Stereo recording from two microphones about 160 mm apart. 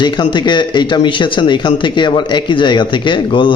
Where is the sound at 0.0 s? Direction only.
30° left (ahead or behind).